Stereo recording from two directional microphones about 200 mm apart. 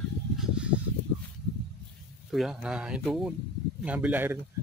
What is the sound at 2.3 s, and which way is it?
Speech, centre (ahead or behind).